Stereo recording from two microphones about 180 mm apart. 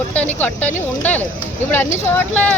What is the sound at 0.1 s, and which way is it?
Speech, 10° left (ahead or behind).